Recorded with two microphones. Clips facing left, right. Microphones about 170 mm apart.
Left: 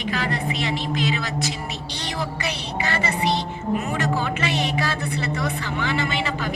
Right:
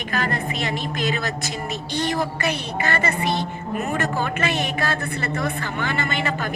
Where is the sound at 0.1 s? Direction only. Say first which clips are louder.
Right 1 dB; 50° right (ahead or behind).